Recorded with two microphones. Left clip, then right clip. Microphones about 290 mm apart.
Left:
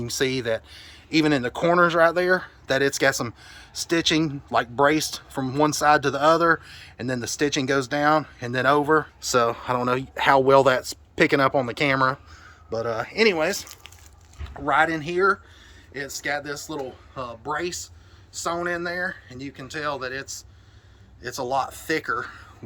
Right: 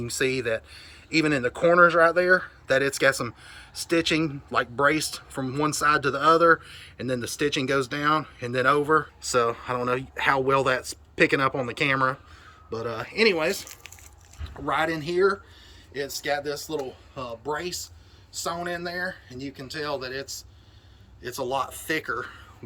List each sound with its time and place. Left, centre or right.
0.0 s speech: left